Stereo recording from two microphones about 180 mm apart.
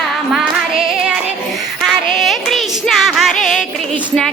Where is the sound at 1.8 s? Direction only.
Centre (ahead or behind).